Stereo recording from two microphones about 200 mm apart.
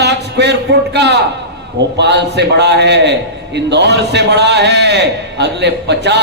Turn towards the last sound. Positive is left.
turn(degrees=-60)  # may be behind; listen again after turning